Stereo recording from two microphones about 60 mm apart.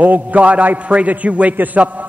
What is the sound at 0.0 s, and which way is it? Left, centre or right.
A man's voice, right.